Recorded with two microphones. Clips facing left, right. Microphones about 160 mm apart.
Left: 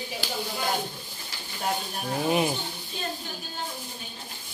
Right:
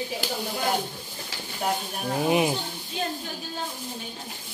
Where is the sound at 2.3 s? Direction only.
15° right (ahead or behind).